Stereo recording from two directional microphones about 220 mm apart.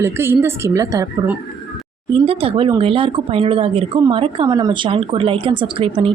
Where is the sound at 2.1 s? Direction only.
25° right (ahead or behind).